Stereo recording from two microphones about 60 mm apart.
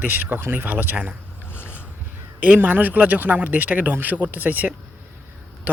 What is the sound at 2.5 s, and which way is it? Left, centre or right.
A woman's voice, right.